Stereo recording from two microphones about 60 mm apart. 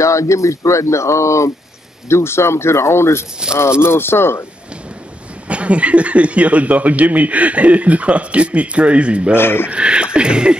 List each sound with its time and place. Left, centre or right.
0.0 s speech: left
5.5 s speech: right
9.3 s speech: left
9.7 s a sound: centre